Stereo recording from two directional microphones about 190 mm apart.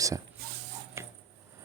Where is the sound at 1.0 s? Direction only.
15° right (ahead or behind).